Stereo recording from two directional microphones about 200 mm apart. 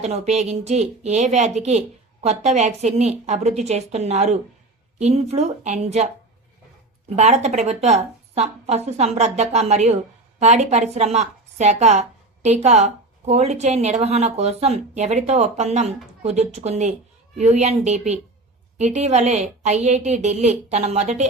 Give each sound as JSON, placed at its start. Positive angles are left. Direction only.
{"t": 0.0, "sound": "a woman's voice", "side_deg": -35}
{"t": 7.2, "sound": "a woman's voice", "side_deg": -35}